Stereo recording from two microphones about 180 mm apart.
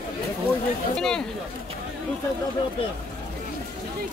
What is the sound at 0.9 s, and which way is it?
Speech, 5° left (ahead or behind).